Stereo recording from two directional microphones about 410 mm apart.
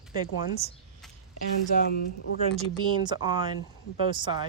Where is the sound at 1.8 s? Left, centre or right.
Left.